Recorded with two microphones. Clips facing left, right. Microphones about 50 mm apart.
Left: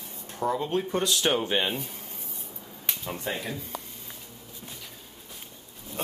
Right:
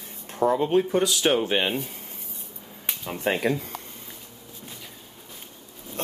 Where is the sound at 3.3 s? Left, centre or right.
Right.